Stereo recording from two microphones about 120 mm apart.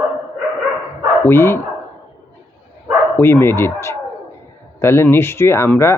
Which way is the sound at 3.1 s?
20° left (ahead or behind).